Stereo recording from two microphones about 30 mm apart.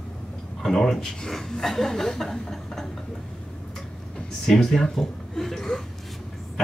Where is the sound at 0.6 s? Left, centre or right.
Centre.